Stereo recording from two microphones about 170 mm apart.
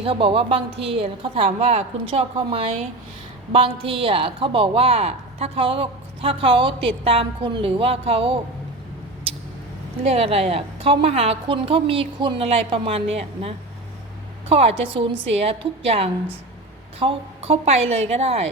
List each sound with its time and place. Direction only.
0.0 s a woman's voice: 35° right (ahead or behind)
10.0 s a woman's voice: 35° right (ahead or behind)
14.5 s a woman's voice: 35° right (ahead or behind)